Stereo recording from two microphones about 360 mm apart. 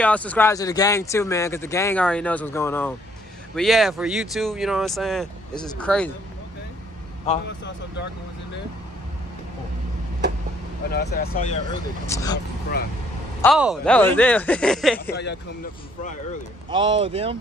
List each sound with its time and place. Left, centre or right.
0.0 s speech: centre
7.3 s speech: centre
10.9 s speech: left
12.1 s speech: centre
13.4 s speech: centre
15.0 s speech: left
16.7 s speech: centre